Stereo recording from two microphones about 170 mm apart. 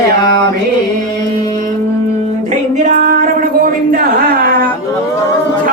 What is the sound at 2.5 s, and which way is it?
Speech, 50° right (ahead or behind).